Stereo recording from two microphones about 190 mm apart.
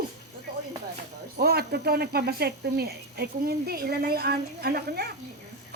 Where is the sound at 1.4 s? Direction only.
55° right (ahead or behind).